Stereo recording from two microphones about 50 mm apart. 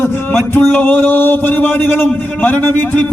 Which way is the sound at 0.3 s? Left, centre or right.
Left.